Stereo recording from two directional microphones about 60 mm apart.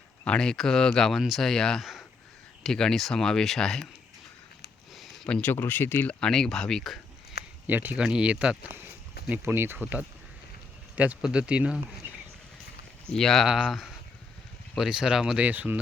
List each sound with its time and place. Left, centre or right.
0.3 s speech: centre
1.8 s a sound: centre
2.6 s speech: centre
4.9 s a sound: centre
5.3 s speech: left
6.1 s speech: centre
7.7 s speech: right
7.9 s speech: centre
9.4 s speech: right
9.7 s speech: right
13.1 s speech: centre
13.7 s speech: centre
15.4 s speech: right